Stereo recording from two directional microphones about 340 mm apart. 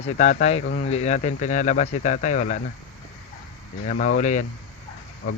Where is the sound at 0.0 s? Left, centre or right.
Centre.